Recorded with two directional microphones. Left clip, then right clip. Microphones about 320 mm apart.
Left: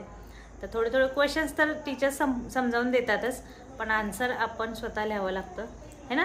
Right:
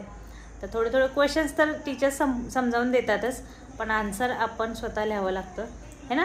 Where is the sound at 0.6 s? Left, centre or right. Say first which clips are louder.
Right 2 dB; centre.